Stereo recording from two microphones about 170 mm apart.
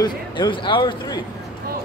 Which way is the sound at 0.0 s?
25° left (ahead or behind).